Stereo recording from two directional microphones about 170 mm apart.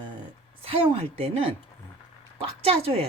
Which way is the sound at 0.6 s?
35° right (ahead or behind).